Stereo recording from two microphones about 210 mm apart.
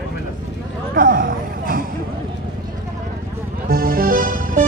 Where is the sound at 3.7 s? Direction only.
45° right (ahead or behind).